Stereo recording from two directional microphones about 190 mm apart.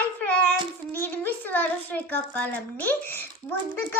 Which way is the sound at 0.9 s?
10° left (ahead or behind).